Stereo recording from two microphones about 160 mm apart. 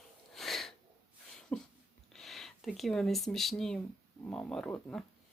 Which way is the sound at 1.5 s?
10° left (ahead or behind).